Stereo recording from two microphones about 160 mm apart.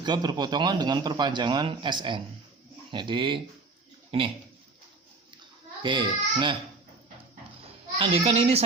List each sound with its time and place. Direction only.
0.0 s a man's voice: 25° right (ahead or behind)
5.8 s a man's voice: 30° right (ahead or behind)
7.9 s a child's voice: 40° right (ahead or behind)